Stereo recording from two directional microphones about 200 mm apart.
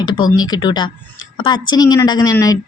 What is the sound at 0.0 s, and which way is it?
Speech, 20° left (ahead or behind).